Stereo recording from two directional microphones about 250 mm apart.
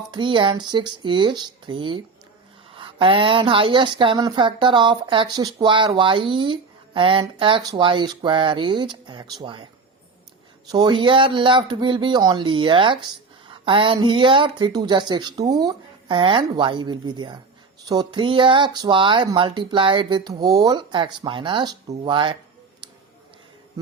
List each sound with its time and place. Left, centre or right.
0.1 s a woman's voice: centre
10.7 s a woman's voice: centre